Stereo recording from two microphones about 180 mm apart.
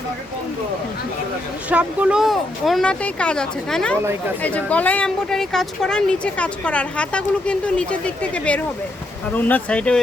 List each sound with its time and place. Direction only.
1.7 s speech: 5° right (ahead or behind)